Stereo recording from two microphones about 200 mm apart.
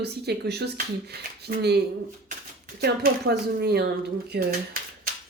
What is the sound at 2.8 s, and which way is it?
Speech, 50° right (ahead or behind).